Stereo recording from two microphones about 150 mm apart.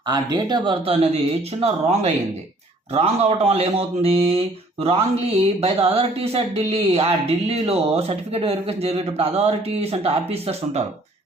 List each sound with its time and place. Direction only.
0.1 s a man's voice: 30° right (ahead or behind); by 10.8 s 45° right (ahead or behind)